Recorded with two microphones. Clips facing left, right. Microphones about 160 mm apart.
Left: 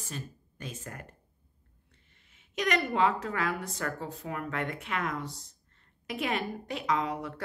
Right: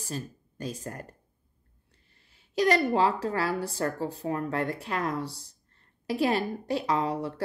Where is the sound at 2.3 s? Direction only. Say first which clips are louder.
Right 6 dB; 35° right (ahead or behind).